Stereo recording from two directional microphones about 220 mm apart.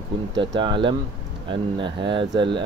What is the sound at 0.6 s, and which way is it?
Speech, 20° right (ahead or behind).